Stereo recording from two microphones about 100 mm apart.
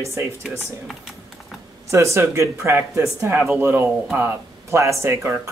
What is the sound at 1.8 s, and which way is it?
Speech, 30° right (ahead or behind).